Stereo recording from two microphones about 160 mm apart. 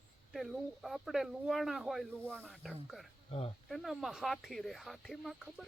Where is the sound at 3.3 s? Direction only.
35° left (ahead or behind).